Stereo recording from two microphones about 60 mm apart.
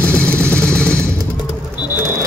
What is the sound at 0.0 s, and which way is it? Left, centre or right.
Vehicle, left.